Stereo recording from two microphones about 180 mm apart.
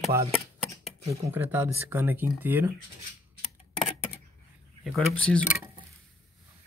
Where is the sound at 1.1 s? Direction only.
10° right (ahead or behind).